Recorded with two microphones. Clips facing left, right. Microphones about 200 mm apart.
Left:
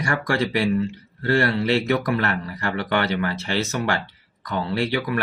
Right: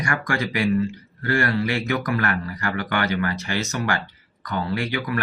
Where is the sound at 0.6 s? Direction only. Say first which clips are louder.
Even; 25° left (ahead or behind).